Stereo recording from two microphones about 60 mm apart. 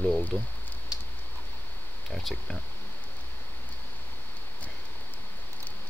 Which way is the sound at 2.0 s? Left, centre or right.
Centre.